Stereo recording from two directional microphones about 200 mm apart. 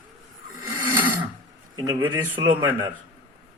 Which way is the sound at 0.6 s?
10° right (ahead or behind).